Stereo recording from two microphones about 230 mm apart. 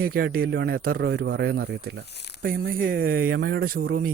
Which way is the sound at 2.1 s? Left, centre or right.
Left.